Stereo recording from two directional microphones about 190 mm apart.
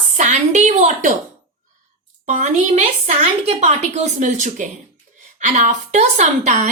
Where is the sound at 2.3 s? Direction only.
40° right (ahead or behind).